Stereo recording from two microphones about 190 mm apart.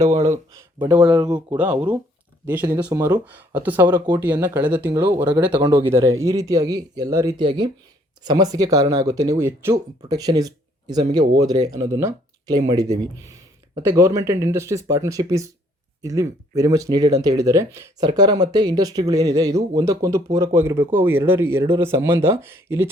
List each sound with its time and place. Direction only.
0.8 s speech: 10° right (ahead or behind)
1.2 s speech: 25° right (ahead or behind)
1.5 s speech: 5° right (ahead or behind)